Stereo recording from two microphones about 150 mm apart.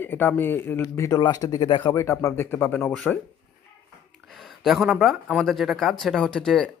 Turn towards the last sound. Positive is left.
turn(degrees=5)  # may be behind; listen again after turning